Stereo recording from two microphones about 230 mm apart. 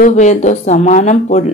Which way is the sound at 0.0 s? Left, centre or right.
Left.